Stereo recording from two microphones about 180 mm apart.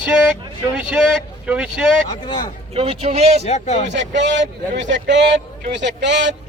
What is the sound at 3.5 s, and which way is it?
Speech, 40° left (ahead or behind).